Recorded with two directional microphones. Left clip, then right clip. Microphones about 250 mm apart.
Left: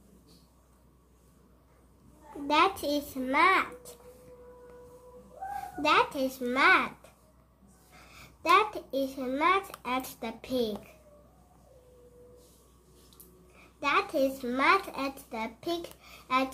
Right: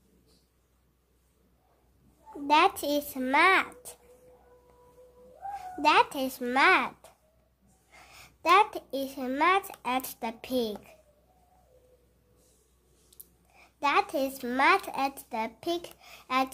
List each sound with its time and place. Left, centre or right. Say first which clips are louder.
2.4 s a child's voice: right 2 dB; right
5.8 s a child's voice: right 2 dB; right
13.7 s a child's voice: right 1 dB; right